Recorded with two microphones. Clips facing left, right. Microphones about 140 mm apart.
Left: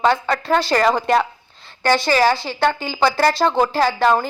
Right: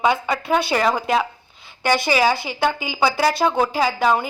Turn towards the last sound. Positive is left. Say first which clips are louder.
# left 2 dB
turn(degrees=-5)  # may be behind; listen again after turning